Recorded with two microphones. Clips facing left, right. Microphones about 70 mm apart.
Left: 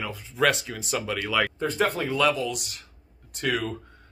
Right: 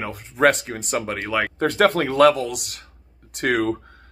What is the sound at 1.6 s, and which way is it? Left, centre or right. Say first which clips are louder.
Speech: right 7 dB; right.